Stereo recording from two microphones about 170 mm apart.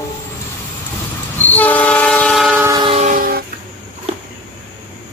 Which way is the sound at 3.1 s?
55° right (ahead or behind).